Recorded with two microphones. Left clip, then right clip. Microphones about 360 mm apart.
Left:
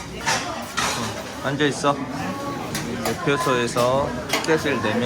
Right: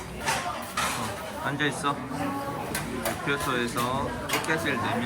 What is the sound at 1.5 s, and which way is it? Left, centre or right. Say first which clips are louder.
Speech: left 7 dB; centre.